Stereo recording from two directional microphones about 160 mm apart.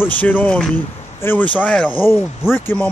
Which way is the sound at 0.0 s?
10° left (ahead or behind).